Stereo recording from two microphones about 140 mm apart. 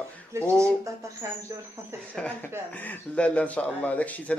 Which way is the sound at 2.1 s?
10° left (ahead or behind).